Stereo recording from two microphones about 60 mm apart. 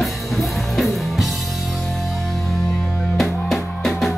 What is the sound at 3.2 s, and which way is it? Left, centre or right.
Music, centre.